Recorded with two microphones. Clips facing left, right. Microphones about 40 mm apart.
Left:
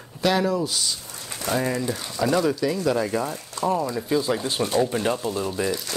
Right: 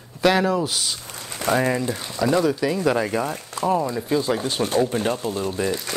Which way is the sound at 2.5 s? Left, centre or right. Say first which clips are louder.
Right 2 dB; right.